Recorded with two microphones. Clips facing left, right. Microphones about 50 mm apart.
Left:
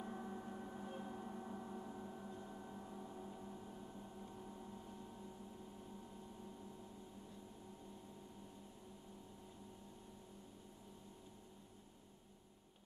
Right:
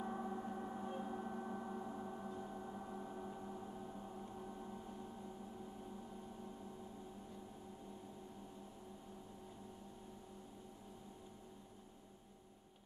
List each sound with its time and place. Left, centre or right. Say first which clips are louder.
0.0 s gong: right 4 dB; centre